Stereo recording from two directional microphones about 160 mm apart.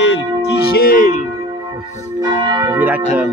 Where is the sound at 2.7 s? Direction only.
10° right (ahead or behind).